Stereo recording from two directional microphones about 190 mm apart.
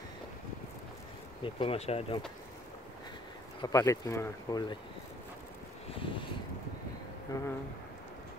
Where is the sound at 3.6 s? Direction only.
15° left (ahead or behind).